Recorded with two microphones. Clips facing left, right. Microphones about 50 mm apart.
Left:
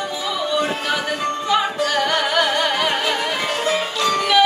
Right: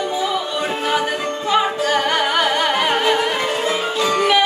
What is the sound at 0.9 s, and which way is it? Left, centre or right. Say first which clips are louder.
Music: right 3 dB; right.